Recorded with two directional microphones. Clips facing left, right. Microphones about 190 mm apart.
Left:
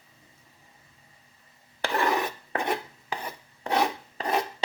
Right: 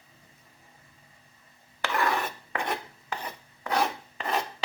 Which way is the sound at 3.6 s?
35° left (ahead or behind).